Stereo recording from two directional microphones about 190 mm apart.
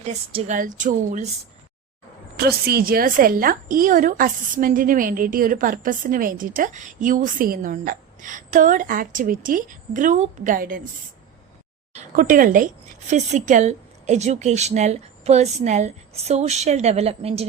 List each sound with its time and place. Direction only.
0.0 s a woman's voice: 35° right (ahead or behind)
0.5 s speech: 45° right (ahead or behind)
2.6 s speech: 50° right (ahead or behind)
11.9 s a woman's voice: 45° right (ahead or behind)